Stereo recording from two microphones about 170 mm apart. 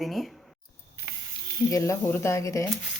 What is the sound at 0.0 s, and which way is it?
Speech, centre (ahead or behind).